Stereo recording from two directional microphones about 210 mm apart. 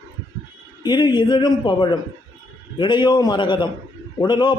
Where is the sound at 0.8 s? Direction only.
20° left (ahead or behind).